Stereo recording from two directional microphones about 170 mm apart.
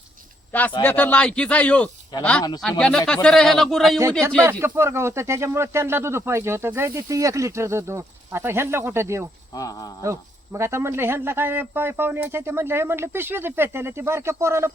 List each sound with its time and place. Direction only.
0.8 s speech: 10° left (ahead or behind)
4.6 s speech: 15° right (ahead or behind)
9.6 s speech: 20° left (ahead or behind)
10.0 s speech: 15° right (ahead or behind)